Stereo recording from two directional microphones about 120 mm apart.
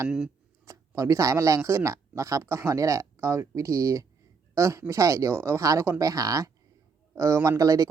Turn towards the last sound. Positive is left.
turn(degrees=-30)  # may be behind; listen again after turning